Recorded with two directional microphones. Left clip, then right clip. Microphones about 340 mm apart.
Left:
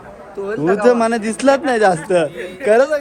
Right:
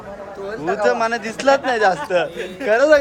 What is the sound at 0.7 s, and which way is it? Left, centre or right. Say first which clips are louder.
A man's voice: left 4 dB; centre.